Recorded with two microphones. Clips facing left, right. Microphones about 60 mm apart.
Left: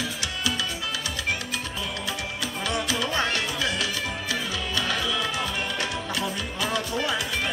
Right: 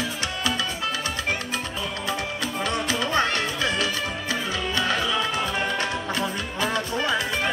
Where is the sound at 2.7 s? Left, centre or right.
Right.